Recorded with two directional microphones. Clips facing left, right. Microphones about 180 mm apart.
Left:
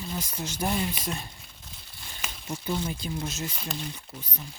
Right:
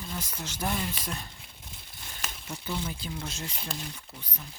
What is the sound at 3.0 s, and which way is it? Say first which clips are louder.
Speech: left 4 dB; 10° left (ahead or behind).